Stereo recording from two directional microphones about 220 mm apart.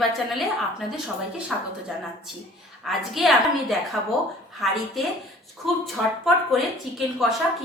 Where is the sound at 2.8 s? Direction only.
Centre (ahead or behind).